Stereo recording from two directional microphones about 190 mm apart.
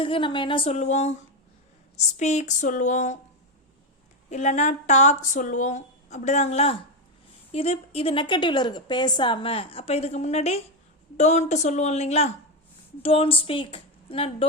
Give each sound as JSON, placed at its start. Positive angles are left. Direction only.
{"t": 0.0, "sound": "a woman's voice", "side_deg": 25}
{"t": 4.3, "sound": "a woman's voice", "side_deg": 40}